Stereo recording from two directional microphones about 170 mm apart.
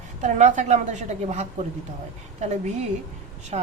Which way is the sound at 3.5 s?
40° right (ahead or behind).